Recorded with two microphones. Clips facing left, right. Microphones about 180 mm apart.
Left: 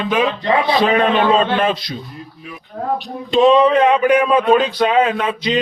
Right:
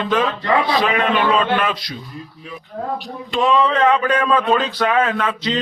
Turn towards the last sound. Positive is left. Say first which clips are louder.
# left 2 dB
turn(degrees=15)  # may be behind; listen again after turning